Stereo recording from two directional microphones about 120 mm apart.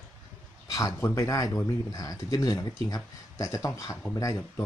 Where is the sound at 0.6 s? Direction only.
30° left (ahead or behind).